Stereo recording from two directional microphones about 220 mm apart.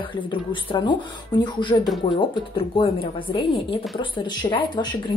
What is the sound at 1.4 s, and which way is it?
Speech, 20° left (ahead or behind).